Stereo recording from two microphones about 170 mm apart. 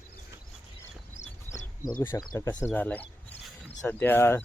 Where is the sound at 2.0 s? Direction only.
15° left (ahead or behind).